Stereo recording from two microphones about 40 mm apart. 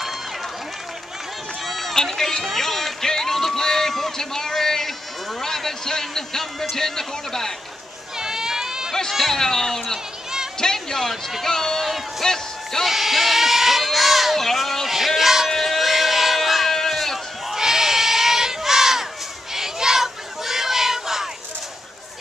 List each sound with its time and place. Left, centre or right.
1.7 s run: centre
5.4 s a man's voice: centre
8.2 s a sound: centre
9.1 s speech: centre
9.4 s a man's voice: centre
11.1 s a man's voice: centre
12.8 s sheep: centre
14.4 s a sound: centre
16.7 s bleat: centre
17.6 s crowd: centre
19.5 s a sound: centre